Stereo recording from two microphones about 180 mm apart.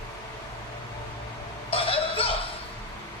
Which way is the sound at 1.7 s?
30° left (ahead or behind).